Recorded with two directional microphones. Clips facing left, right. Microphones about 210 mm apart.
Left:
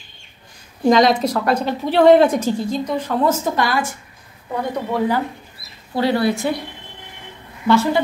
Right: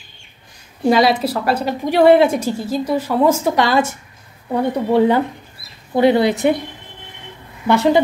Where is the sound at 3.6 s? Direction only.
25° right (ahead or behind).